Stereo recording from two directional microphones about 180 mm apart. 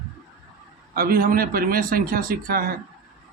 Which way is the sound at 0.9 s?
55° right (ahead or behind).